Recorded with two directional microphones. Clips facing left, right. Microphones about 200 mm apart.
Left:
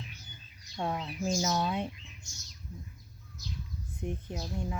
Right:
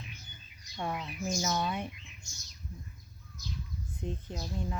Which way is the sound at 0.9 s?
30° left (ahead or behind).